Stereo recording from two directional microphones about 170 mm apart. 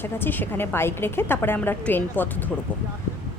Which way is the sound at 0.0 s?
10° left (ahead or behind).